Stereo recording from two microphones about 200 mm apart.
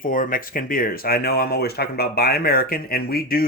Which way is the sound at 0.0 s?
45° left (ahead or behind).